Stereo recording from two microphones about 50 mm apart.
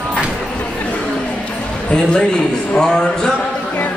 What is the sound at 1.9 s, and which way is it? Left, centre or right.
A man's voice, centre.